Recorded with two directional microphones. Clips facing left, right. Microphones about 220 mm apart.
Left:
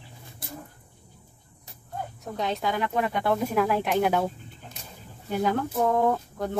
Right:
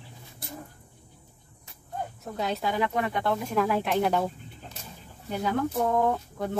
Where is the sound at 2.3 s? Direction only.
Centre (ahead or behind).